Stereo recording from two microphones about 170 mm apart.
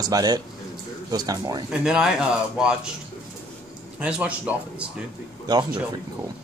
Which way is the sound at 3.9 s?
5° right (ahead or behind).